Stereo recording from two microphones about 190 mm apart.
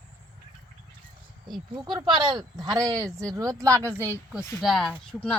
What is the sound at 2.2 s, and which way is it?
Speech, 25° right (ahead or behind).